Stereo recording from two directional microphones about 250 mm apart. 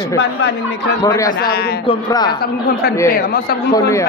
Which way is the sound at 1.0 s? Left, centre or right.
Centre.